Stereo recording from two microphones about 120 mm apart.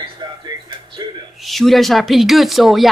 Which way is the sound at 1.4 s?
Centre (ahead or behind).